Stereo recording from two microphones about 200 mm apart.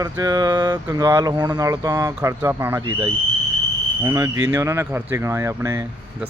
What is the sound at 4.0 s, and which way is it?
Speech, 15° right (ahead or behind).